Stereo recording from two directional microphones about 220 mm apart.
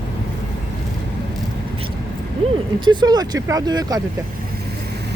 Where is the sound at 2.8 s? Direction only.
20° right (ahead or behind).